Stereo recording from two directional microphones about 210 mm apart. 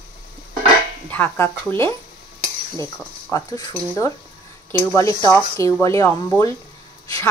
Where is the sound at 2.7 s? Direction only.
15° left (ahead or behind).